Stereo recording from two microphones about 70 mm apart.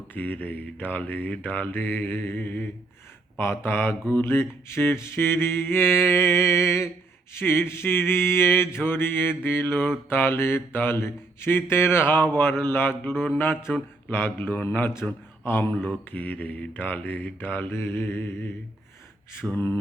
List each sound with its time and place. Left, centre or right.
0.1 s mantra: left
3.3 s mantra: left
19.5 s mantra: left